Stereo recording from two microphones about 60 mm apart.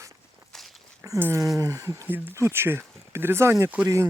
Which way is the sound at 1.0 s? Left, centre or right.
Right.